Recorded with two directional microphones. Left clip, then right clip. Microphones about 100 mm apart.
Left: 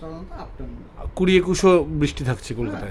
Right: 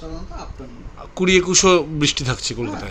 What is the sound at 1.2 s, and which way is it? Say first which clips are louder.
Speech: right 3 dB; 40° left (ahead or behind).